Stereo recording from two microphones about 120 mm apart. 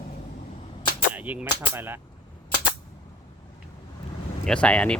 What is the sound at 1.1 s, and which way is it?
Speech, 10° right (ahead or behind).